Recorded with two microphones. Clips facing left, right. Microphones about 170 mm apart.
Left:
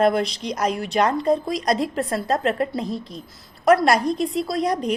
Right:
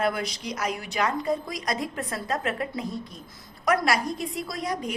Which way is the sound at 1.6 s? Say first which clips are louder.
Left 8 dB; 35° left (ahead or behind).